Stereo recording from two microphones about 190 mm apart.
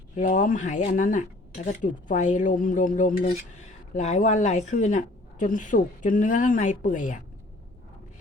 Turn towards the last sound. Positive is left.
turn(degrees=40)  # may be behind; listen again after turning